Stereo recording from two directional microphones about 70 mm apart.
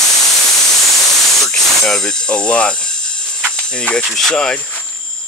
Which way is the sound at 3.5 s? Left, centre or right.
Centre.